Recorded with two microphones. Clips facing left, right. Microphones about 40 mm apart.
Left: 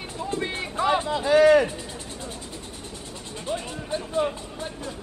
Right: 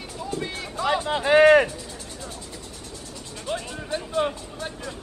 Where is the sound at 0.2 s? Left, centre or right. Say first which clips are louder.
Left 2 dB; left.